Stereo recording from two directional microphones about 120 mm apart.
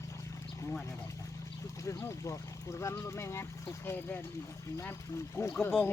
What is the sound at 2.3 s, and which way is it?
Speech, 25° left (ahead or behind).